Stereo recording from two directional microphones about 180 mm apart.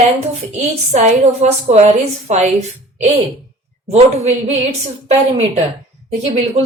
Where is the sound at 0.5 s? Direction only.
40° right (ahead or behind).